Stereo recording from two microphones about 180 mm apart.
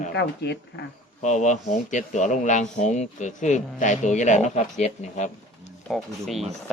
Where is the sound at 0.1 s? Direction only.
70° left (ahead or behind).